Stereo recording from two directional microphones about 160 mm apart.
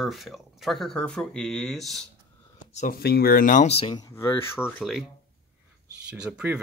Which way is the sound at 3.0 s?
80° left.